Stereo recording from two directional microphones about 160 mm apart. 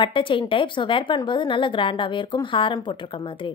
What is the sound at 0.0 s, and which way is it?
A woman's voice, 30° left (ahead or behind).